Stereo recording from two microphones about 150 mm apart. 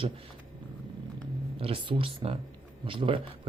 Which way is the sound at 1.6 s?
35° right (ahead or behind).